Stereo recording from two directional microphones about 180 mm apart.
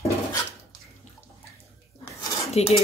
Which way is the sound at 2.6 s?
35° left (ahead or behind).